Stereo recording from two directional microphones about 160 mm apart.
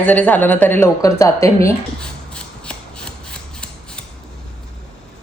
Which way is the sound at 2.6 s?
5° left (ahead or behind).